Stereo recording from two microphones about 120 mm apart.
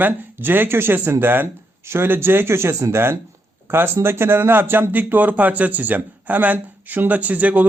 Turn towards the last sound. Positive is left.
turn(degrees=-10)  # may be behind; listen again after turning